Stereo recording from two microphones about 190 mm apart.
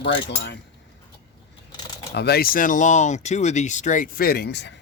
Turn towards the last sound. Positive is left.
turn(degrees=65)  # may be behind; listen again after turning